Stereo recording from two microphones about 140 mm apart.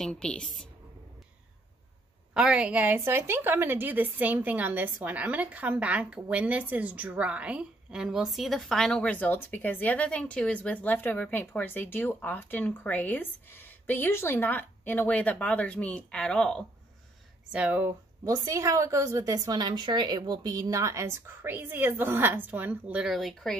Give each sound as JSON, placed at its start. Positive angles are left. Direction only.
{"t": 0.0, "sound": "a woman's voice", "side_deg": 5}
{"t": 2.3, "sound": "a woman's voice", "side_deg": -5}
{"t": 17.5, "sound": "speech", "side_deg": -10}
{"t": 18.2, "sound": "a woman's voice", "side_deg": -25}